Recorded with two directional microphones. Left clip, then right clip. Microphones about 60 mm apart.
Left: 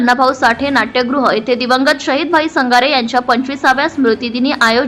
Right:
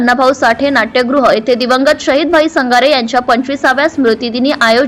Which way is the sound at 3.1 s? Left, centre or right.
Right.